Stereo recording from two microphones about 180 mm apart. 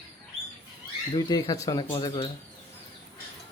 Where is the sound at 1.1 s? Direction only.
20° left (ahead or behind).